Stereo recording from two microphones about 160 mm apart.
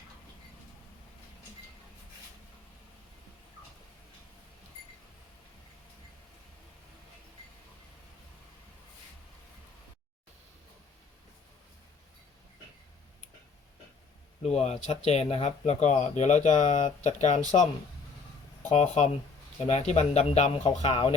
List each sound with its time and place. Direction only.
14.4 s speech: 40° left (ahead or behind)
18.7 s speech: 45° left (ahead or behind)